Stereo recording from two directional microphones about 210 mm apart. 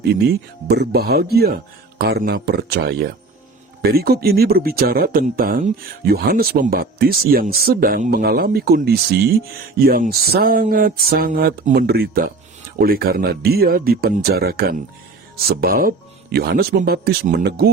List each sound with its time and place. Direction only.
0.7 s speech: 50° right (ahead or behind)